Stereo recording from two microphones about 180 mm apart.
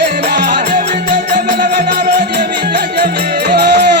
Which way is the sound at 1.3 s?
50° right (ahead or behind).